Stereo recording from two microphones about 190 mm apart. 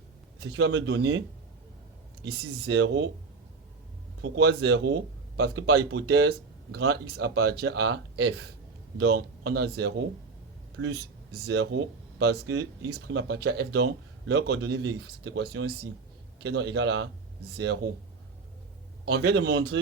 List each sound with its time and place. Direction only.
0.5 s speech: 70° right (ahead or behind)
2.2 s speech: 75° right (ahead or behind)
4.2 s speech: 65° right (ahead or behind)
10.8 s speech: 75° right (ahead or behind)
19.0 s speech: 70° right (ahead or behind)